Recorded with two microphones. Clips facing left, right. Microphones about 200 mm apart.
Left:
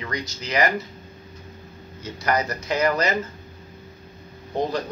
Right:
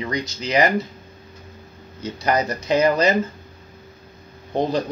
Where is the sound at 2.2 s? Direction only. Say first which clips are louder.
Right 3 dB; 20° right (ahead or behind).